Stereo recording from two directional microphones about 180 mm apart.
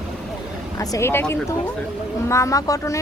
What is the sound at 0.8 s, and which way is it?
A woman's voice, 15° left (ahead or behind).